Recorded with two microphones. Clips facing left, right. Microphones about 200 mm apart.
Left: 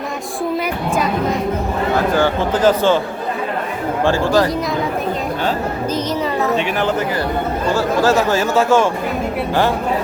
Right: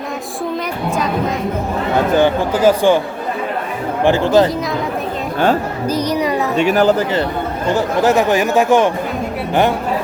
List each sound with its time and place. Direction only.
2.1 s speech: 15° right (ahead or behind)
4.0 s speech: 20° right (ahead or behind)
5.9 s speech: 15° right (ahead or behind)
6.6 s speech: 40° right (ahead or behind)
7.7 s speech: 20° right (ahead or behind)